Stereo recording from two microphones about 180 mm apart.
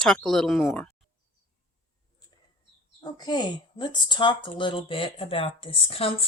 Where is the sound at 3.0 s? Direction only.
25° left (ahead or behind).